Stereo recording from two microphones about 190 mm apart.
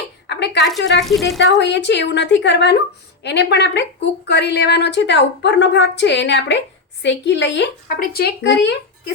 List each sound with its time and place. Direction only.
0.3 s a sound: 65° left (ahead or behind)
0.8 s a woman's voice: 65° left (ahead or behind)
1.0 s speech: centre (ahead or behind)
1.4 s a woman's voice: 70° left (ahead or behind)
7.9 s speech: 50° left (ahead or behind)